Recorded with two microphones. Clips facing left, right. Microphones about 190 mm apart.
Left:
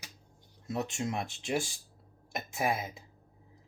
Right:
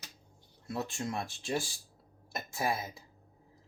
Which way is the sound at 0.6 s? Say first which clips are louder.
Left 2 dB; 20° left (ahead or behind).